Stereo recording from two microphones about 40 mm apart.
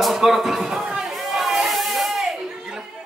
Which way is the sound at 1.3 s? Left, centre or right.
Centre.